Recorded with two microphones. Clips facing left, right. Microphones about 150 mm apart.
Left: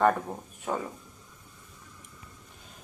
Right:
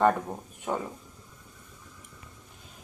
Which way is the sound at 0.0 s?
Centre (ahead or behind).